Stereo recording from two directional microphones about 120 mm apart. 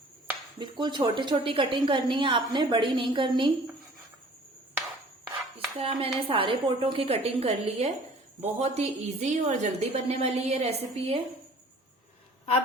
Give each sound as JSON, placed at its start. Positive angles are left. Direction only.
{"t": 0.6, "sound": "a woman's voice", "side_deg": -40}
{"t": 5.2, "sound": "a woman's voice", "side_deg": -50}